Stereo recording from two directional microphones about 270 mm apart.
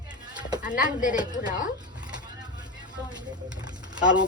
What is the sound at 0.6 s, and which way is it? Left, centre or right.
Speech, centre.